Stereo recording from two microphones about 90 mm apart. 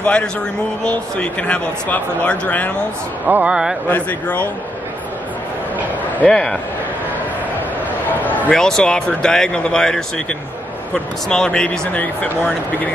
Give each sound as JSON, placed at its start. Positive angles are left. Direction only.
{"t": 0.0, "sound": "speech", "side_deg": 10}
{"t": 3.3, "sound": "speech", "side_deg": -20}
{"t": 3.9, "sound": "speech", "side_deg": 15}
{"t": 6.2, "sound": "speech", "side_deg": 10}
{"t": 8.2, "sound": "a sound", "side_deg": 20}
{"t": 8.5, "sound": "speech", "side_deg": 5}
{"t": 11.2, "sound": "speech", "side_deg": 10}